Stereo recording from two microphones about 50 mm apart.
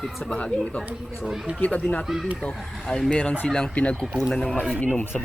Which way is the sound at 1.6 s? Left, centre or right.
Left.